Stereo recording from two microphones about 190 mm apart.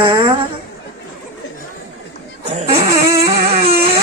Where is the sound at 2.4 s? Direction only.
35° right (ahead or behind).